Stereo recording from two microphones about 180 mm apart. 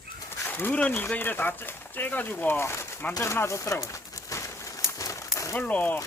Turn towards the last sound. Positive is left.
turn(degrees=10)  # may be behind; listen again after turning